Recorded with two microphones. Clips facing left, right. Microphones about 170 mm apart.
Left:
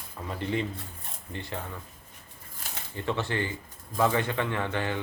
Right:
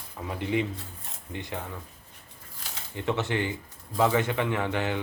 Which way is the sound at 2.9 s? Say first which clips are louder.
Right 2 dB; 15° right (ahead or behind).